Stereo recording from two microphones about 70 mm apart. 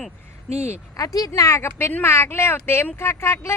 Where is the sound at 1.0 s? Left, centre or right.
Left.